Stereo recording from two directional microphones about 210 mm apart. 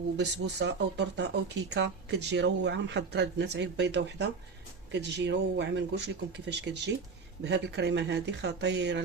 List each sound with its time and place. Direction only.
0.2 s speech: 55° right (ahead or behind)